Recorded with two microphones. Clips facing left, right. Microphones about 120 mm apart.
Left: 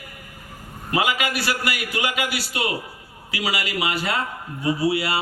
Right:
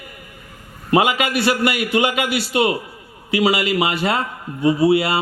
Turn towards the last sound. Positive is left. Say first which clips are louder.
# right 6 dB
turn(degrees=-25)  # may be behind; listen again after turning